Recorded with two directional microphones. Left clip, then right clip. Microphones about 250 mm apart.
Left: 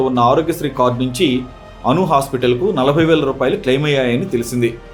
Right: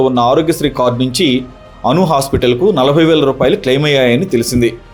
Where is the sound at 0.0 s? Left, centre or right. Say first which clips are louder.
Right 3 dB; right.